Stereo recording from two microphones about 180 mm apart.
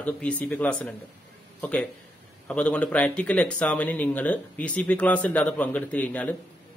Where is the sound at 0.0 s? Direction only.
5° left (ahead or behind).